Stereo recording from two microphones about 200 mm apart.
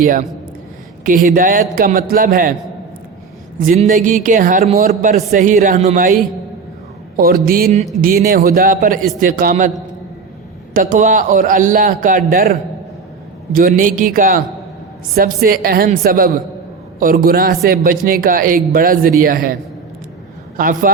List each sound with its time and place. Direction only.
0.0 s a man's voice: 45° right (ahead or behind)
3.7 s a man's voice: 40° right (ahead or behind)
7.2 s a man's voice: 50° right (ahead or behind)
10.8 s a man's voice: 40° right (ahead or behind)
20.6 s a man's voice: 45° right (ahead or behind)